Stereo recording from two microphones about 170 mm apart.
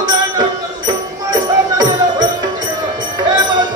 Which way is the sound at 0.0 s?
20° right (ahead or behind).